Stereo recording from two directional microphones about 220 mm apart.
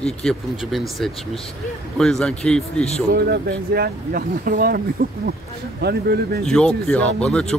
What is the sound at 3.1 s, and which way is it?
Speech, 45° right (ahead or behind).